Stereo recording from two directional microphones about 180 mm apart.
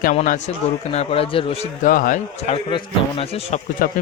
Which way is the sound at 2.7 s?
35° left (ahead or behind).